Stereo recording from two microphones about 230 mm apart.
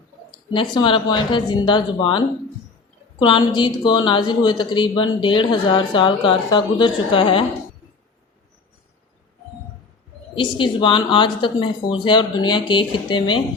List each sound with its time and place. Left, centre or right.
0.3 s a woman's voice: left
10.3 s a woman's voice: left